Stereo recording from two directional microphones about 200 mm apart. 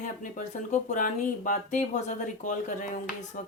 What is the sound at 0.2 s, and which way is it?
Speech, 40° left (ahead or behind).